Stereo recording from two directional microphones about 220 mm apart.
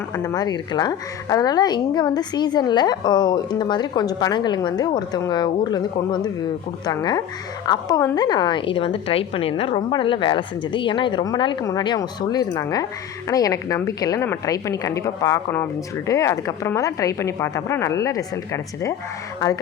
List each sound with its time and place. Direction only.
0.1 s a woman's voice: 15° left (ahead or behind)